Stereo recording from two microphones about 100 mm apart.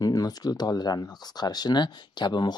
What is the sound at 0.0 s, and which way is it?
Speech, 40° left (ahead or behind).